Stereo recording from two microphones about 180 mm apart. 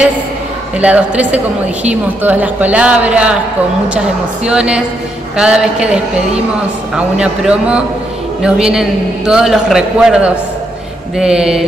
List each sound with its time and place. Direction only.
0.7 s a woman's voice: 5° right (ahead or behind)